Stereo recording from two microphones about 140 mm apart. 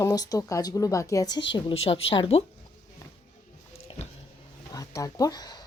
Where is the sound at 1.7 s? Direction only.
45° left (ahead or behind).